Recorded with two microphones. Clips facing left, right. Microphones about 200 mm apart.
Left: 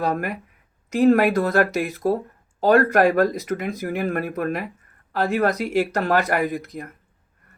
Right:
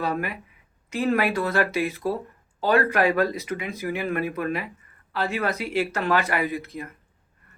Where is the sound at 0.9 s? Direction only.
45° left (ahead or behind).